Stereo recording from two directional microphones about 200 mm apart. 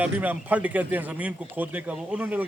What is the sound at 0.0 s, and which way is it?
Speech, 10° right (ahead or behind).